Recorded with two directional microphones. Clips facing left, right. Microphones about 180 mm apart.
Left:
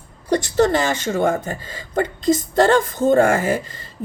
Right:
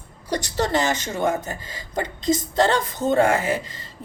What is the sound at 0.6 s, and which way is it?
Speech, 50° left (ahead or behind).